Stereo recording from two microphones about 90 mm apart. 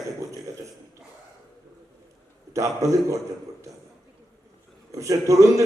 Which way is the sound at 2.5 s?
35° right (ahead or behind).